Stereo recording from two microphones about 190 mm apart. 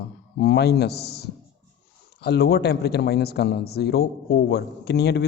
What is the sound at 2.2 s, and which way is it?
Speech, 60° left (ahead or behind).